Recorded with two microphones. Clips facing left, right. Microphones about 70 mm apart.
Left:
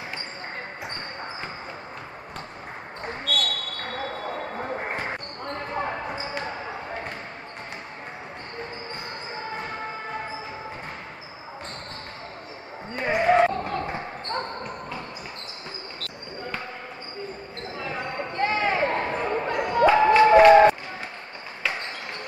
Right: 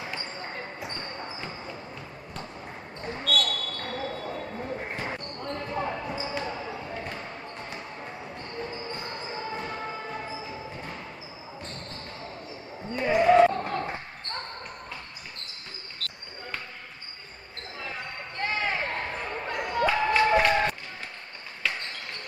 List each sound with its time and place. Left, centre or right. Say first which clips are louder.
0.1 s basketball bounce: left 1 dB; left
3.0 s basketball bounce: even; left
8.5 s basketball bounce: right 1 dB; left
12.9 s basketball bounce: right 1 dB; left
16.0 s basketball bounce: left 1 dB; centre
17.8 s a sound: left 7 dB; left
19.0 s a sound: left 7 dB; left
19.9 s applause: left 8 dB; left